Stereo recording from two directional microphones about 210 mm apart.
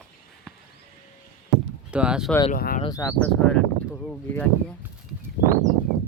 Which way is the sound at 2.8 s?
15° left (ahead or behind).